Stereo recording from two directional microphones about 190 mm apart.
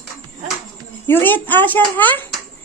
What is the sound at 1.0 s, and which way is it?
A woman's voice, 10° left (ahead or behind).